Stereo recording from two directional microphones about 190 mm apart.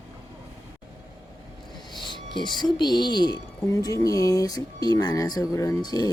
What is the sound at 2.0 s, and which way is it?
Speech, 25° left (ahead or behind).